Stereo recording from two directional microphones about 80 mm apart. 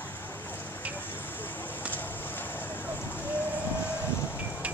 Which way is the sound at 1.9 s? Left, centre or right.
Left.